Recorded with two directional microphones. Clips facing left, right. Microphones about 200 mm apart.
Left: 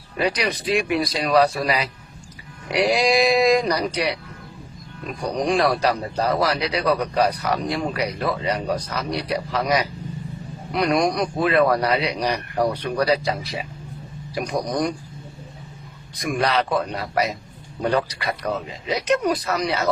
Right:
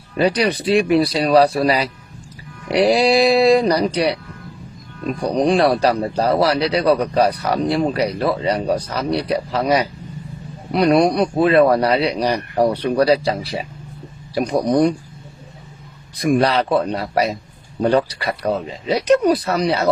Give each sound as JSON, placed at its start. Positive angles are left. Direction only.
{"t": 0.2, "sound": "a man's voice", "side_deg": -35}
{"t": 5.2, "sound": "a man's voice", "side_deg": -35}
{"t": 16.1, "sound": "a man's voice", "side_deg": -30}